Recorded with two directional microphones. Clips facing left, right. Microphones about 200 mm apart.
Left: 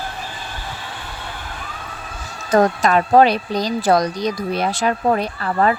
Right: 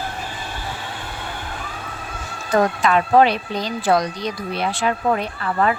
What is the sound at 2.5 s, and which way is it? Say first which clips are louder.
Speech: left 2 dB; 40° left (ahead or behind).